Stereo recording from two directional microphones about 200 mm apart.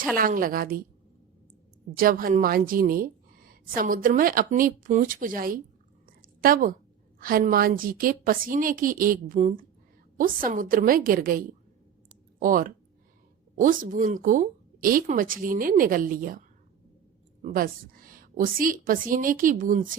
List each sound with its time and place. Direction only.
0.2 s a woman's voice: 45° right (ahead or behind)
1.9 s a woman's voice: 45° right (ahead or behind)
6.2 s a sound: 45° right (ahead or behind)
7.2 s a woman's voice: 45° right (ahead or behind)
17.4 s a woman's voice: 45° right (ahead or behind)